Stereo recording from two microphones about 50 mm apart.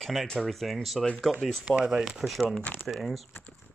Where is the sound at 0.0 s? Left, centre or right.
Centre.